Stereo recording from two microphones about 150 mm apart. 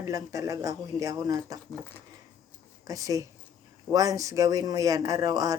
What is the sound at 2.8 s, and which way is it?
Speech, 25° right (ahead or behind).